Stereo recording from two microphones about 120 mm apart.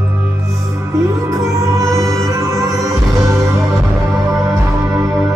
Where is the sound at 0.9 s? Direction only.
25° right (ahead or behind).